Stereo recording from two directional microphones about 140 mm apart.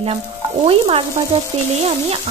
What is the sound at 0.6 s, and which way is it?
Stir, 40° right (ahead or behind).